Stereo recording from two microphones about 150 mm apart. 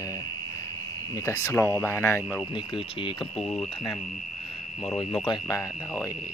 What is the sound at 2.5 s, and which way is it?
Speech, 35° left (ahead or behind).